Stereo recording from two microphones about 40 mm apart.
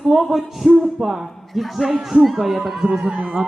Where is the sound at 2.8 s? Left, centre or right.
Right.